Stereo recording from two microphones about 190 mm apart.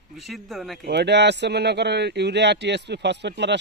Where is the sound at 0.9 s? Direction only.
65° right (ahead or behind).